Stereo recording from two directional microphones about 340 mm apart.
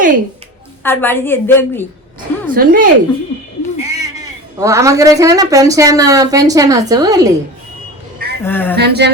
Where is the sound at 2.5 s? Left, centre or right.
Right.